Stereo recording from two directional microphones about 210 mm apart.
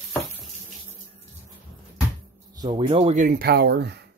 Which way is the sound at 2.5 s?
20° right (ahead or behind).